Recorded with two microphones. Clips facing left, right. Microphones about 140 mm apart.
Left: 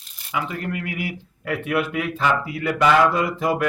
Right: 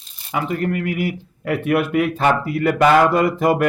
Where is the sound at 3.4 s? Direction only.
65° right (ahead or behind).